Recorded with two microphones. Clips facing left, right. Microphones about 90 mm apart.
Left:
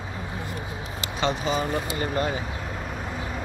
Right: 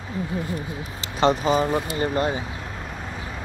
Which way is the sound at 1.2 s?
35° right (ahead or behind).